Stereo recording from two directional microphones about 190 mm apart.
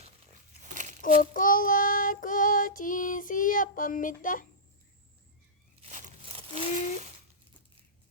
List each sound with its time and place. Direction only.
0.6 s crumpling: 40° right (ahead or behind)
1.0 s child singing: 45° left (ahead or behind)
5.8 s a sound: 35° right (ahead or behind)